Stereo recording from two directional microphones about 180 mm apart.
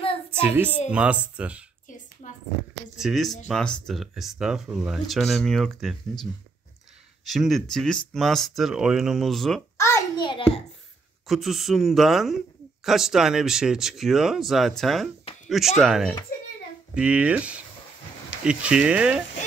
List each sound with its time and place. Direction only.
0.3 s child singing: 10° right (ahead or behind)
0.8 s speech: 5° right (ahead or behind)
2.2 s a sound: 35° left (ahead or behind)
3.0 s speech: centre (ahead or behind)
7.2 s speech: centre (ahead or behind)
9.8 s a sound: 15° left (ahead or behind)
11.2 s speech: centre (ahead or behind)